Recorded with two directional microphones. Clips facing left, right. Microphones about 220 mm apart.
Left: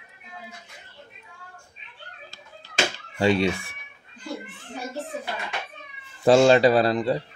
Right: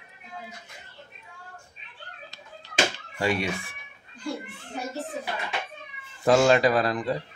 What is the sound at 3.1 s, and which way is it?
Speech, 25° left (ahead or behind).